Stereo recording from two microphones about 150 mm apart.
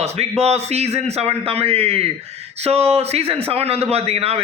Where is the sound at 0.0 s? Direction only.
45° right (ahead or behind).